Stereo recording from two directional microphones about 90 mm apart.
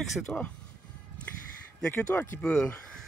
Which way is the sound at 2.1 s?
25° left (ahead or behind).